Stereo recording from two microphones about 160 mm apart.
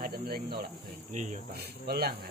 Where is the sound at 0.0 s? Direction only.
70° right (ahead or behind).